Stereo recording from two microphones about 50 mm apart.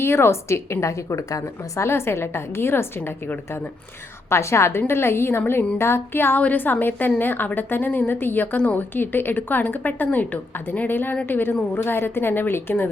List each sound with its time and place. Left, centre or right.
0.0 s a woman's voice: left
1.9 s a woman's voice: left
4.3 s a woman's voice: left
6.4 s a woman's voice: left